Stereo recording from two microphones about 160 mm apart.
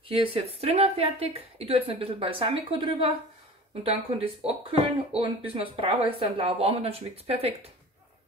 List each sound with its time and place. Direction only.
0.1 s speech: 35° right (ahead or behind)